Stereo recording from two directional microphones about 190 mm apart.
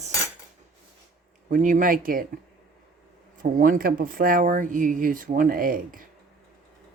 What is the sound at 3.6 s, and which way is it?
Speech, 50° right (ahead or behind).